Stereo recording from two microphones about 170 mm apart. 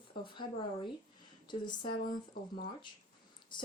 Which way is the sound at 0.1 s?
30° left (ahead or behind).